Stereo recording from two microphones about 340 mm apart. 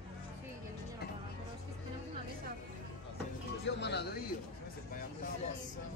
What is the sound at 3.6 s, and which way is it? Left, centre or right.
Music, left.